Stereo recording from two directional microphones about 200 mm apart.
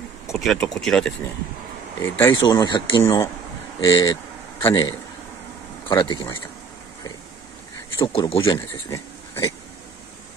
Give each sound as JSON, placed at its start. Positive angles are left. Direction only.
{"t": 0.3, "sound": "speech", "side_deg": 0}
{"t": 8.1, "sound": "speech", "side_deg": 30}
{"t": 8.5, "sound": "speech", "side_deg": 15}